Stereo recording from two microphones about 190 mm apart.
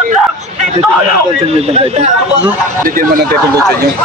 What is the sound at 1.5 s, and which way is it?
Speech, 35° right (ahead or behind).